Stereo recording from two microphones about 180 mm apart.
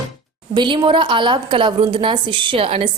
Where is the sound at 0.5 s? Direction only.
25° right (ahead or behind).